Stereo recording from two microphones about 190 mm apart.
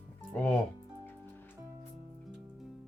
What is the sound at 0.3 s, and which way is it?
Speech, 10° left (ahead or behind).